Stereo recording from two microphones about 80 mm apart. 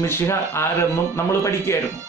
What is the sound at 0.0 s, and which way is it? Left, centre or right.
Speech, left.